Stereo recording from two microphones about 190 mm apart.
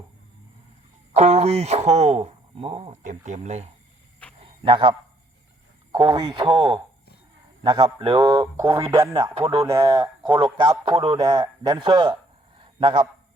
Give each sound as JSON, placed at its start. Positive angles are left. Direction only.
{"t": 1.1, "sound": "speech", "side_deg": -35}
{"t": 4.4, "sound": "cricket", "side_deg": -25}
{"t": 5.9, "sound": "a man's voice", "side_deg": -25}
{"t": 10.2, "sound": "a man's voice", "side_deg": -25}
{"t": 12.5, "sound": "a sound", "side_deg": -25}